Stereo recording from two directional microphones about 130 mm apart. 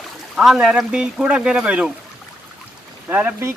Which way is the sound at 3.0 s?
20° right (ahead or behind).